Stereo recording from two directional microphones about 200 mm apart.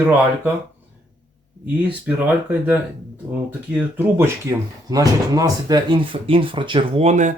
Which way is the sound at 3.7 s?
10° right (ahead or behind).